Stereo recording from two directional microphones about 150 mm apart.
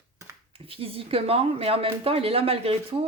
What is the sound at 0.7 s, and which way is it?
Speech, 40° right (ahead or behind).